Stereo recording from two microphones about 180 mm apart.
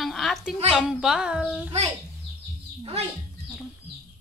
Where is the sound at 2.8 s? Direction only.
35° right (ahead or behind).